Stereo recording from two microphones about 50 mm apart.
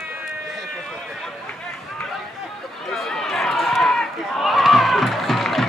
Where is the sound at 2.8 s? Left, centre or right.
Centre.